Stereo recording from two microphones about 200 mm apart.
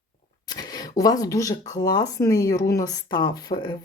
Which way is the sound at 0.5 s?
20° left (ahead or behind).